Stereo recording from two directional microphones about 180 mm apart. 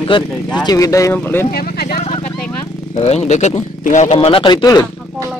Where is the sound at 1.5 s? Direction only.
55° left (ahead or behind).